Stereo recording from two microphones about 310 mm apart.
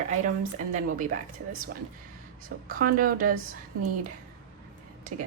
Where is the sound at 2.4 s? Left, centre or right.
Right.